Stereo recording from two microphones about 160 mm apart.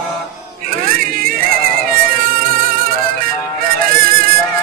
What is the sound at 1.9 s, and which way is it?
Music, 65° right (ahead or behind).